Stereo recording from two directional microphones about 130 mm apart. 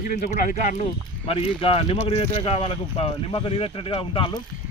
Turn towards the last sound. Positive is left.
turn(degrees=40)  # may be behind; listen again after turning